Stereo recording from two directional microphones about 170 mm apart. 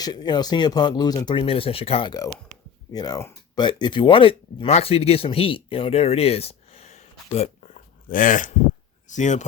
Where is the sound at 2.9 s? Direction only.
20° left (ahead or behind); by 7.8 s 40° left (ahead or behind).